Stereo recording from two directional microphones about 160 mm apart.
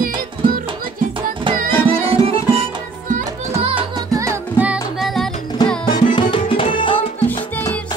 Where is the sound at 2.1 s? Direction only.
35° right (ahead or behind).